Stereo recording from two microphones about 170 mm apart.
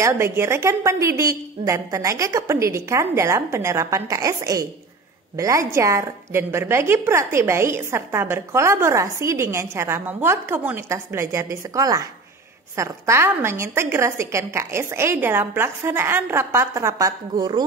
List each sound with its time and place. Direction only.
0.0 s a woman's voice: 15° right (ahead or behind)